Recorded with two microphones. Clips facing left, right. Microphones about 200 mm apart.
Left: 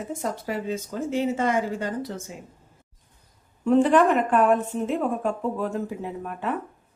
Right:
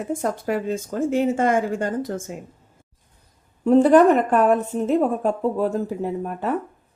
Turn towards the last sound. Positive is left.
turn(degrees=-40)  # may be behind; listen again after turning